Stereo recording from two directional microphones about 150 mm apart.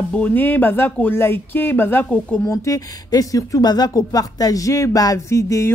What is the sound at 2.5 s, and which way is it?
Speech, 20° left (ahead or behind).